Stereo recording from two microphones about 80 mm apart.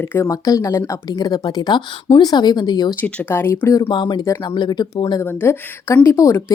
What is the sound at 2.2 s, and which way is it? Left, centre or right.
Speech, left.